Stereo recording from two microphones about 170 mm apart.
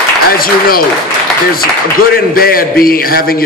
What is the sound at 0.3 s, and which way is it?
Speech, 60° left (ahead or behind).